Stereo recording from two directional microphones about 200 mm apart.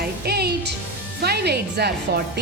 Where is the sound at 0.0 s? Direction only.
50° right (ahead or behind).